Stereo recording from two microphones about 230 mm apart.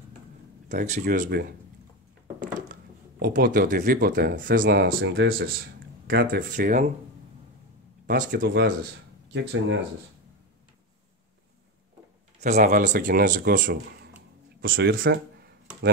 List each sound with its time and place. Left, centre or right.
0.7 s speech: right
2.7 s speech: right
8.1 s speech: right
12.4 s speech: right